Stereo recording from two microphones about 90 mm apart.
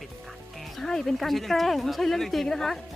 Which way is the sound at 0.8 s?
5° left (ahead or behind).